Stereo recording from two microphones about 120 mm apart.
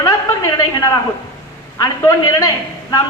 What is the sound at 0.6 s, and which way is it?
A woman's voice, 30° left (ahead or behind).